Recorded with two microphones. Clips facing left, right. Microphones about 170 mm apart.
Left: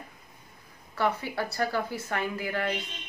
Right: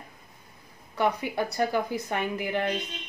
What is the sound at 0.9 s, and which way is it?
Speech, 15° right (ahead or behind).